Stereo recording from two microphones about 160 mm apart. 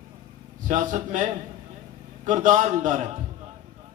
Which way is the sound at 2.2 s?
50° right (ahead or behind).